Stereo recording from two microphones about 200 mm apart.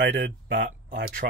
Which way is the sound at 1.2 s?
45° right (ahead or behind).